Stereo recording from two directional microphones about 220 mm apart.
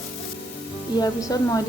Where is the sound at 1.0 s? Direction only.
15° left (ahead or behind).